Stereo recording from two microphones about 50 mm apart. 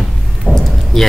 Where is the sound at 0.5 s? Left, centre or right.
Centre.